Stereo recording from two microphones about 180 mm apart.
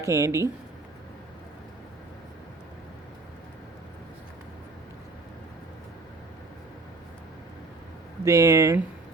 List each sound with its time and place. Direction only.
0.0 s speech: 15° right (ahead or behind)
8.2 s speech: 15° right (ahead or behind)